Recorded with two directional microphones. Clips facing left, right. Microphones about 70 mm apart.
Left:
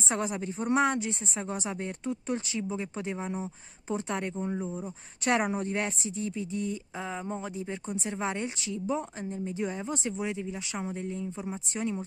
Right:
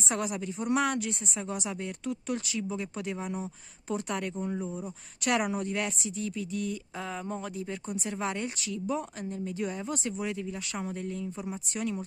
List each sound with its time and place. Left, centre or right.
0.1 s speech: left
4.5 s speech: centre
5.2 s speech: left